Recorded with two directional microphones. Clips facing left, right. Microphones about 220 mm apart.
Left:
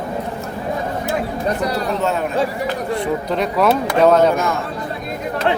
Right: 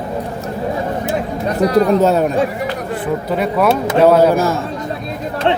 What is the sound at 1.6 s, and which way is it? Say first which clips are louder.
Speech: right 8 dB; 40° right (ahead or behind).